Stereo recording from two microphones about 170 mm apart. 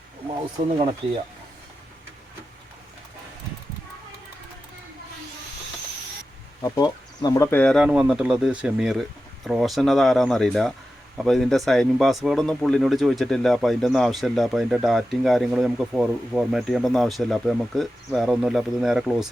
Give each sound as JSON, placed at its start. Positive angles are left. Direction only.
{"t": 1.0, "sound": "speech", "side_deg": -30}
{"t": 6.6, "sound": "speech", "side_deg": 20}
{"t": 7.6, "sound": "speech", "side_deg": 0}